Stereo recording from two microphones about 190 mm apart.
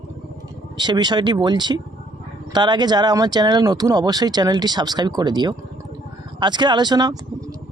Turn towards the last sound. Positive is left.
turn(degrees=-20)  # may be behind; listen again after turning